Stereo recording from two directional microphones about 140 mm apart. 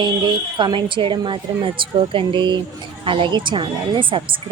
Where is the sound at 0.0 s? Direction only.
35° right (ahead or behind).